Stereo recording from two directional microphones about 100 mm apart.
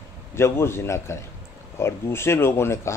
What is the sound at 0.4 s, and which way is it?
Speech, 25° left (ahead or behind).